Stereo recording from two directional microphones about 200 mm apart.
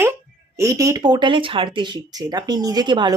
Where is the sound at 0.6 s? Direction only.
15° right (ahead or behind).